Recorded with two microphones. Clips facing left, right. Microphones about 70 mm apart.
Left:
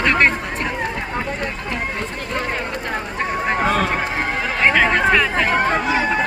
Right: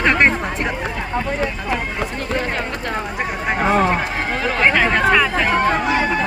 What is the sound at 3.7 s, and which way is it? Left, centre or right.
Speech, right.